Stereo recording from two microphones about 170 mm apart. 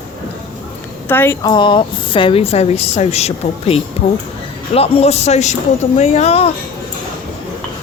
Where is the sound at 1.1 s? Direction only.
10° left (ahead or behind).